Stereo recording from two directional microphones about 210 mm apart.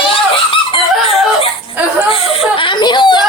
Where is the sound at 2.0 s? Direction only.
25° left (ahead or behind).